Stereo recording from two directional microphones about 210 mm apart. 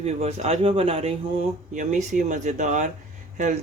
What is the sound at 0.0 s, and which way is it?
A man's voice, 30° right (ahead or behind).